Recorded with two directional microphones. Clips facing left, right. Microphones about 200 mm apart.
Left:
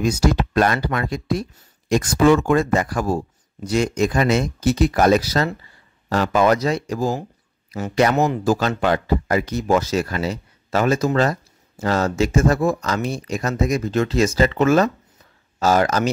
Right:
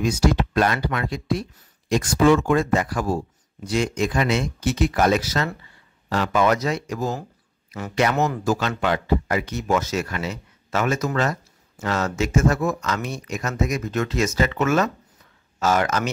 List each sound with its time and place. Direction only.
0.0 s speech: 40° left (ahead or behind)